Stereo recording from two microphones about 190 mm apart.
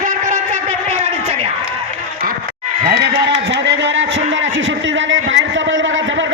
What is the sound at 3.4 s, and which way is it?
Vehicle, 65° right (ahead or behind).